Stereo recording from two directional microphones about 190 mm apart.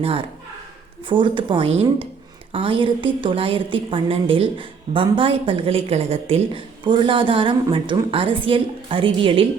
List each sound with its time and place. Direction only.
0.0 s a woman's voice: 30° right (ahead or behind)